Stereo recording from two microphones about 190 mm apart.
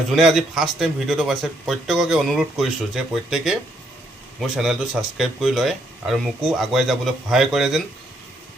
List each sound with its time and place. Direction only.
0.1 s speech: centre (ahead or behind)